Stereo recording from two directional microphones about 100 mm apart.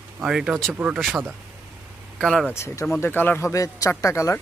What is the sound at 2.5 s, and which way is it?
Speech, 25° left (ahead or behind).